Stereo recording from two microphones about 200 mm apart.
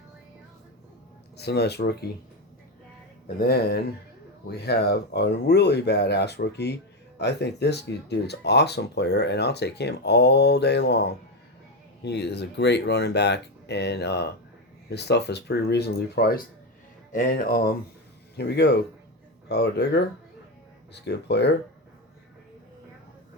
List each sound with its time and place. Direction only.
1.4 s speech: 55° left (ahead or behind)
3.2 s speech: 50° left (ahead or behind)